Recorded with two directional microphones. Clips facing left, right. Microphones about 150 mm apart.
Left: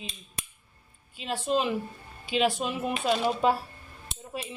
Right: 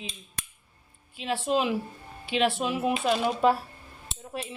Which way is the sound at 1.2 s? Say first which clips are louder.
Right 1 dB; 5° right (ahead or behind).